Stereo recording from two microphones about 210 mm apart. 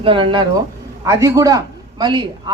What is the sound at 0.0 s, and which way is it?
A woman's voice, 25° right (ahead or behind).